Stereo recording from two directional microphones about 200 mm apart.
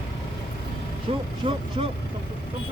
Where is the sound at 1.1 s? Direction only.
30° right (ahead or behind).